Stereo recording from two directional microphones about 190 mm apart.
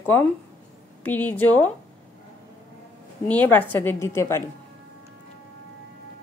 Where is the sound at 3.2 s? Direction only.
10° left (ahead or behind).